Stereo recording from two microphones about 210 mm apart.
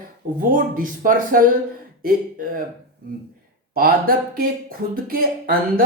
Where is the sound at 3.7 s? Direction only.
45° right (ahead or behind).